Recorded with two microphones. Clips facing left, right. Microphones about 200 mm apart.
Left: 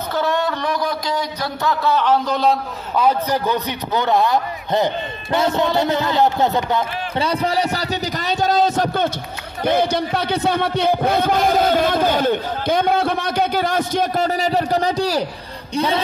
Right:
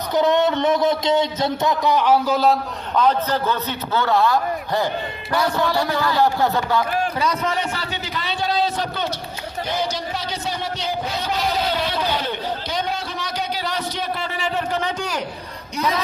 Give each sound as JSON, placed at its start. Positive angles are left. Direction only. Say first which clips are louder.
{"t": 0.1, "sound": "a sound", "louder": "right 4 dB", "side_deg": -20}
{"t": 2.9, "sound": "a man's voice", "louder": "left 1 dB", "side_deg": 10}
{"t": 7.2, "sound": "a man's voice", "louder": "left 3 dB", "side_deg": 30}